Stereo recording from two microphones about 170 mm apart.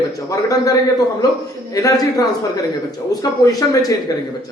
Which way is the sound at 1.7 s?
20° left (ahead or behind).